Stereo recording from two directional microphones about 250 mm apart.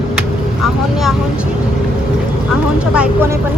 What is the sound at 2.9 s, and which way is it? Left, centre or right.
Vehicle, centre.